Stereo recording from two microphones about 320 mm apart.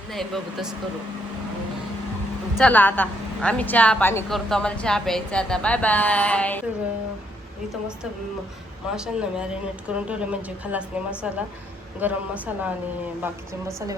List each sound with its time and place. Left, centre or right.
0.1 s a woman's voice: centre
2.6 s a woman's voice: centre
9.0 s a woman's voice: centre